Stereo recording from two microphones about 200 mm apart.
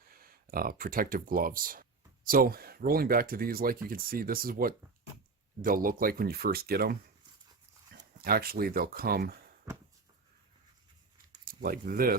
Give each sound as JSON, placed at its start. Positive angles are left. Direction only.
{"t": 0.0, "sound": "speech", "side_deg": -45}
{"t": 8.2, "sound": "speech", "side_deg": -50}
{"t": 11.3, "sound": "a sound", "side_deg": -45}